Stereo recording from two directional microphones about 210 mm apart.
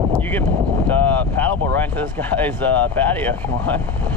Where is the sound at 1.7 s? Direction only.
10° left (ahead or behind).